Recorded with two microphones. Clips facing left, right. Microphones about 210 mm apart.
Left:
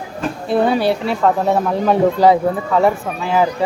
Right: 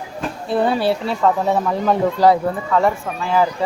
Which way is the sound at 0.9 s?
Centre (ahead or behind).